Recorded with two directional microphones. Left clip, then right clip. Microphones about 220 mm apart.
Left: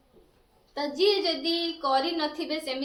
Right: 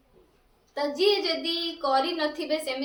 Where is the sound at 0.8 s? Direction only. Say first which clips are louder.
Right 1 dB; 10° right (ahead or behind).